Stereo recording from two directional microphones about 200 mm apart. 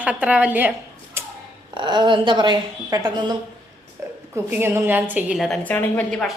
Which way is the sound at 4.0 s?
15° right (ahead or behind).